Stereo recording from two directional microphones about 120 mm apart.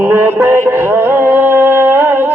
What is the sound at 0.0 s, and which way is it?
Music, 20° right (ahead or behind).